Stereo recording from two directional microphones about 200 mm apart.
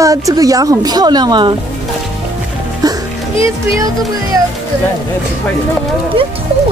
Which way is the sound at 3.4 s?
15° right (ahead or behind).